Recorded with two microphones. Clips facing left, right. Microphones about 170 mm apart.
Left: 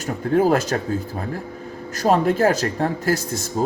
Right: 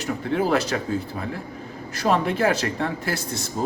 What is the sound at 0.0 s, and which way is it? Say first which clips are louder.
Speech: left 5 dB; 45° left (ahead or behind).